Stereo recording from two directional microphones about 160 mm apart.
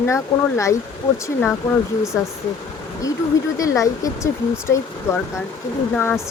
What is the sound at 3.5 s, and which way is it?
Speech, 20° left (ahead or behind).